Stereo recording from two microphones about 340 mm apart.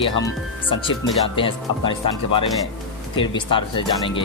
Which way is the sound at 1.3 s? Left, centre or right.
Centre.